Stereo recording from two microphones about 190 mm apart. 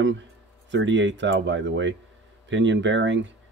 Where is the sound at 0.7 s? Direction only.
75° right (ahead or behind).